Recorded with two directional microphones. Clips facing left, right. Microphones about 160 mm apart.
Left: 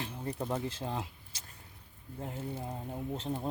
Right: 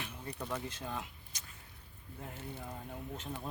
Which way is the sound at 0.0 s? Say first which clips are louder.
Left 6 dB; 30° left (ahead or behind).